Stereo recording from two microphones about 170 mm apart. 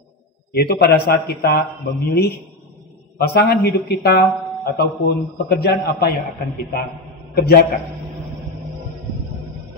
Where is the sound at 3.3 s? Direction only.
75° left (ahead or behind).